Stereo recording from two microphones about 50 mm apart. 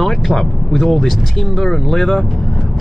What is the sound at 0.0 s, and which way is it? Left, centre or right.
Speech, centre.